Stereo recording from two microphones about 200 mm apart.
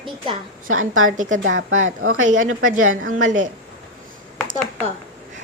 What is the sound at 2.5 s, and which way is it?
Speech, 90° right.